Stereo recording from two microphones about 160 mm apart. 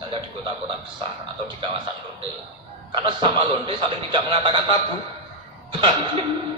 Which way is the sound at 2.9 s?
35° right (ahead or behind).